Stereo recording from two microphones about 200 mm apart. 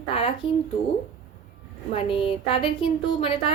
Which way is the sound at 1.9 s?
25° left (ahead or behind).